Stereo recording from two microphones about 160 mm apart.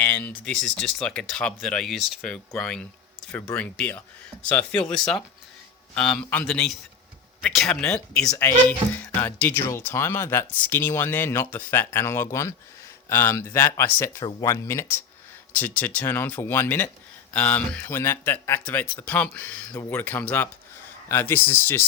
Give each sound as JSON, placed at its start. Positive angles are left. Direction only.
{"t": 0.0, "sound": "speech", "side_deg": 10}